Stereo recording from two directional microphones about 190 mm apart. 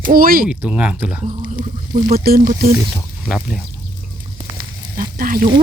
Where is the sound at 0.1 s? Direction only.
50° right (ahead or behind).